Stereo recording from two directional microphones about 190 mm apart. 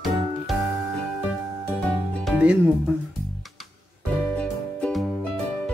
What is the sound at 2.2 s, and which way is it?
Music, 5° right (ahead or behind).